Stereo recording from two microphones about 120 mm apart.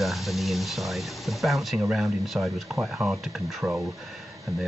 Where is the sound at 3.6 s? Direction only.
25° right (ahead or behind).